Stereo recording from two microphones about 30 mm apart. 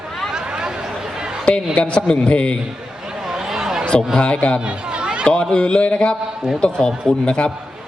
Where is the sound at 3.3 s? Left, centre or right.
Centre.